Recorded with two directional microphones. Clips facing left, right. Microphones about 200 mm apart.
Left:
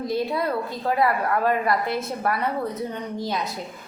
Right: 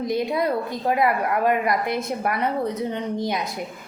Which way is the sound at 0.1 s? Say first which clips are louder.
Right 2 dB; 15° right (ahead or behind).